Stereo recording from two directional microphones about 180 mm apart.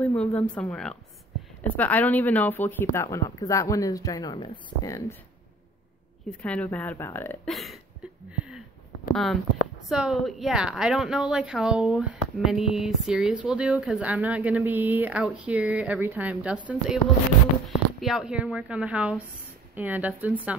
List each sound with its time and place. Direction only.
0.0 s speech: 10° left (ahead or behind)
6.4 s speech: 5° left (ahead or behind)
7.4 s a woman's voice: centre (ahead or behind)
8.3 s a sound: 5° right (ahead or behind)
9.1 s a woman's voice: centre (ahead or behind)